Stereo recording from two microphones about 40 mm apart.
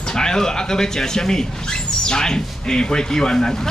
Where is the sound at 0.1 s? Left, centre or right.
Centre.